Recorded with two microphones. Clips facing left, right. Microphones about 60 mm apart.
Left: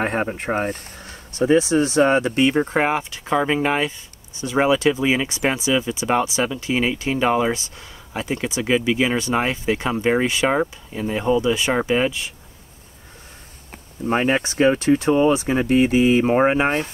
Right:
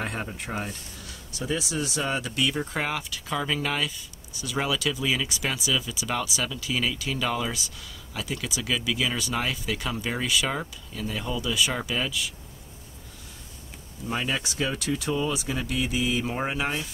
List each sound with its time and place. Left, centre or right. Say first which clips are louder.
0.0 s speech: left 10 dB; left
14.0 s speech: left 10 dB; left